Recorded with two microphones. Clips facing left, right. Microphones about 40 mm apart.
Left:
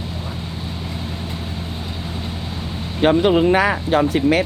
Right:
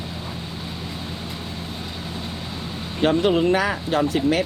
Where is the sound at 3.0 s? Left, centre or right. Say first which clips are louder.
Left 4 dB; left.